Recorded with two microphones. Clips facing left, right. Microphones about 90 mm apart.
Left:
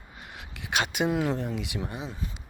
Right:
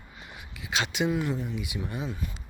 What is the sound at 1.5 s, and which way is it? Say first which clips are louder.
Speech: left 1 dB; 70° left (ahead or behind).